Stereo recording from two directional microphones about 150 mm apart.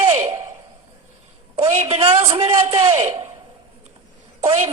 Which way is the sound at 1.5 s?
45° right (ahead or behind).